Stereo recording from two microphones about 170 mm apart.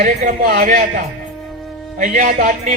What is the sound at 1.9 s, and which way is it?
Speech, 50° right (ahead or behind).